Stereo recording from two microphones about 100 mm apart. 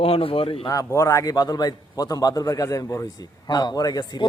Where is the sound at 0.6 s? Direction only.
30° left (ahead or behind).